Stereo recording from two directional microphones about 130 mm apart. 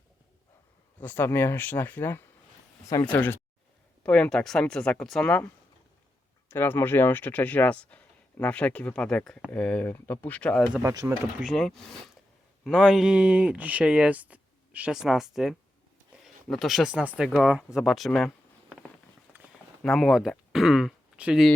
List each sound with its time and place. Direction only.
0.9 s speech: 15° left (ahead or behind)
6.5 s speech: 20° left (ahead or behind)
10.8 s speech: 25° right (ahead or behind)
11.3 s speech: centre (ahead or behind)
19.3 s a sound: 10° right (ahead or behind)
19.8 s speech: centre (ahead or behind)